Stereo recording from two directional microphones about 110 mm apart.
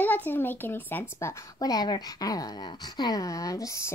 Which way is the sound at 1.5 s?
35° left (ahead or behind).